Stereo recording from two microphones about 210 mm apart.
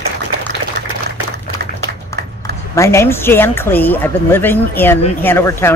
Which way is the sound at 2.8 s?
10° left (ahead or behind).